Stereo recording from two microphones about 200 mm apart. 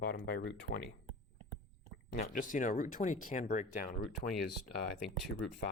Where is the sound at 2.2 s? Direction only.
40° left (ahead or behind).